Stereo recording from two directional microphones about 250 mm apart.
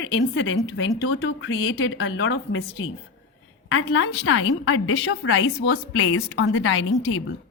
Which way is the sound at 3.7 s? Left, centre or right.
Left.